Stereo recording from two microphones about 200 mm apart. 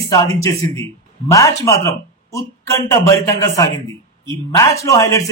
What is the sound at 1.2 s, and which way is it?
A man's voice, 15° left (ahead or behind).